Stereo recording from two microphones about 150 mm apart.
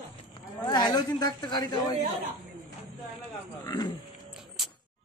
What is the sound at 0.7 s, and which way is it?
A woman's voice, 25° left (ahead or behind).